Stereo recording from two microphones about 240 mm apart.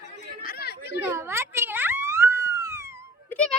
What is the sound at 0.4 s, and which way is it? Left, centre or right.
Chatter, left.